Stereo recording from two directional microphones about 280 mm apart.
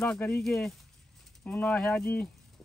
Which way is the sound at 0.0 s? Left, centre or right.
Centre.